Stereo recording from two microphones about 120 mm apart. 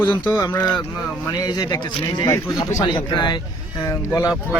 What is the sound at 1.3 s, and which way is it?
Speech, 35° left (ahead or behind).